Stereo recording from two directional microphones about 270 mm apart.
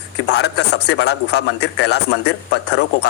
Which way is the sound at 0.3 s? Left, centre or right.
Left.